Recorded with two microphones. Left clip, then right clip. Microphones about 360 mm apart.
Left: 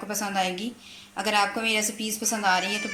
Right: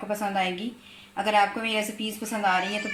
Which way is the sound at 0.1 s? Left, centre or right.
Centre.